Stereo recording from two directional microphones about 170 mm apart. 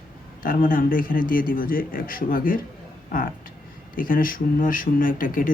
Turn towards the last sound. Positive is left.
turn(degrees=55)  # may be behind; listen again after turning